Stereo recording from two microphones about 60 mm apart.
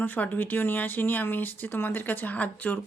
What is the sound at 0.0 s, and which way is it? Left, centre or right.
A woman's voice, left.